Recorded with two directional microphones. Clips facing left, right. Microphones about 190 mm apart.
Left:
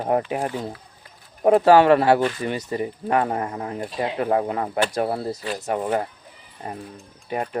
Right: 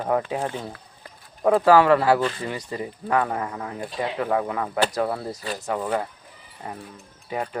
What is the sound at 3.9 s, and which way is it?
Whip, 30° left (ahead or behind).